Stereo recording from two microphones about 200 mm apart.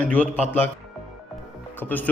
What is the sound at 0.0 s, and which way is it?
Speech, 5° left (ahead or behind).